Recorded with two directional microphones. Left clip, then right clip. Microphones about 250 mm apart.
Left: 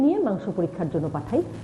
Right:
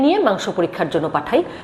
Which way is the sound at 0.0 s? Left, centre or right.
Centre.